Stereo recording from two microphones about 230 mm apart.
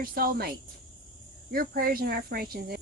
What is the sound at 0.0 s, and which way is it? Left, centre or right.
Speech, right.